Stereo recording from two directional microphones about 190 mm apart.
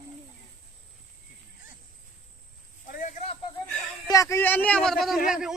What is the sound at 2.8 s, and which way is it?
Speech, 45° left (ahead or behind).